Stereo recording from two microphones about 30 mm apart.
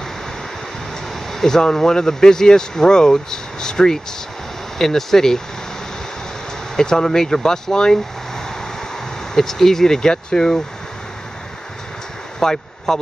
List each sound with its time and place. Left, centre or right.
1.4 s speech: centre
6.8 s speech: left
9.3 s speech: centre
12.4 s speech: centre